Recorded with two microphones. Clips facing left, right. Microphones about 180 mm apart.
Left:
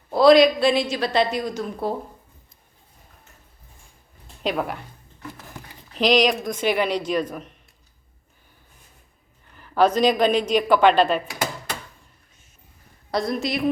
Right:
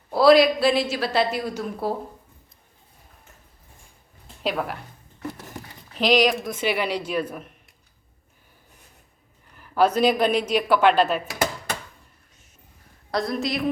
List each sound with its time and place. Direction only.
0.1 s a woman's voice: 5° right (ahead or behind)
4.4 s a woman's voice: centre (ahead or behind)
5.9 s speech: centre (ahead or behind)
9.6 s a woman's voice: 5° right (ahead or behind)
13.1 s a woman's voice: centre (ahead or behind)